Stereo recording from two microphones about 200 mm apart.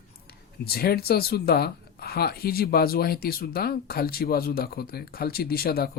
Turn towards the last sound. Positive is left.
turn(degrees=50)  # may be behind; listen again after turning